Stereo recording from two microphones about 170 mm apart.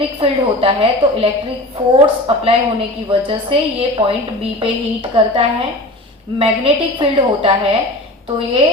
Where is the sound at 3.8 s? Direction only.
30° right (ahead or behind).